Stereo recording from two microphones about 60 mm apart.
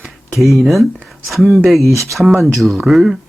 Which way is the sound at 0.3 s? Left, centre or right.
Centre.